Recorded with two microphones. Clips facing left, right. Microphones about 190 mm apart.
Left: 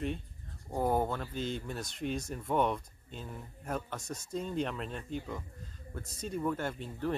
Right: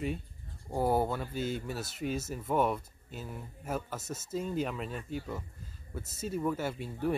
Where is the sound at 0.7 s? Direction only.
10° right (ahead or behind).